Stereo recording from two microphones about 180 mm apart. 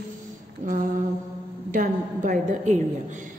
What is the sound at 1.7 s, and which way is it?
A man's voice, 45° right (ahead or behind).